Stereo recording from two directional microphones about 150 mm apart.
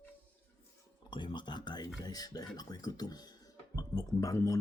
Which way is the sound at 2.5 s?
25° left (ahead or behind).